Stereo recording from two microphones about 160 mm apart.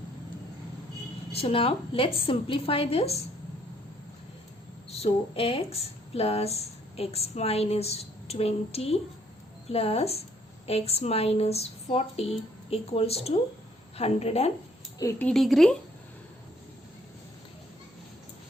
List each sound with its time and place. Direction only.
1.3 s speech: 40° left (ahead or behind)
4.9 s speech: 35° left (ahead or behind)
15.2 s a woman's voice: centre (ahead or behind)